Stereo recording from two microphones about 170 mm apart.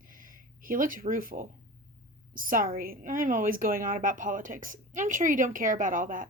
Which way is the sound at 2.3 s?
55° right (ahead or behind).